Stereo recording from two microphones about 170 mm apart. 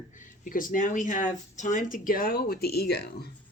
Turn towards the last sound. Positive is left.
turn(degrees=70)  # may be behind; listen again after turning